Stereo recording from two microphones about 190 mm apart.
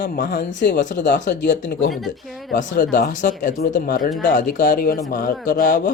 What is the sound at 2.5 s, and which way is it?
Speech, 50° left (ahead or behind).